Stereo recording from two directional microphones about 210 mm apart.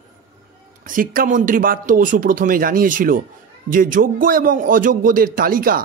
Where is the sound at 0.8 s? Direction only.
40° right (ahead or behind).